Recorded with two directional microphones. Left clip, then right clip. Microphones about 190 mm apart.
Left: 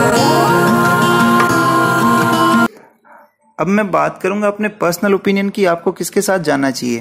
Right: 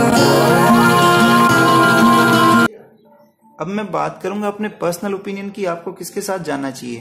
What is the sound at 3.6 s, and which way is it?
A man's voice, 35° left (ahead or behind).